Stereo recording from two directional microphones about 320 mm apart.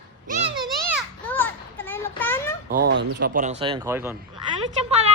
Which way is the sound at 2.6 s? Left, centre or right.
Right.